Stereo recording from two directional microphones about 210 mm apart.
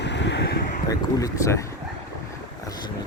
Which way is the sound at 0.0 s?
55° left (ahead or behind).